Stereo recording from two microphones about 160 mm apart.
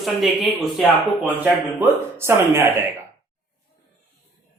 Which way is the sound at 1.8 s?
15° right (ahead or behind).